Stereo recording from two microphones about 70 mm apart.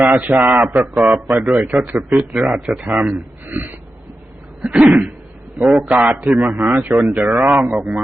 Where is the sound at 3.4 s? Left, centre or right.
Right.